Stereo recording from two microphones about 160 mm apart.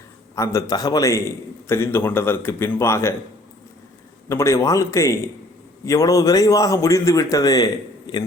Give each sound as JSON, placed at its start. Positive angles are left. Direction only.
{"t": 0.3, "sound": "a man's voice", "side_deg": 20}
{"t": 4.3, "sound": "a man's voice", "side_deg": 15}